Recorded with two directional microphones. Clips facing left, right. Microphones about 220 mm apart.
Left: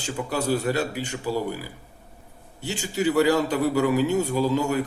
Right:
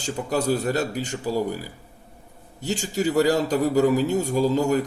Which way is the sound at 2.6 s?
40° right (ahead or behind).